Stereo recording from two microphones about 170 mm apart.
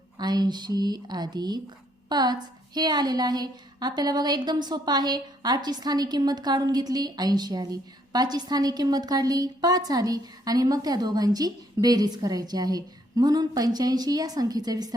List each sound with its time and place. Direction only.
0.2 s a woman's voice: 25° right (ahead or behind)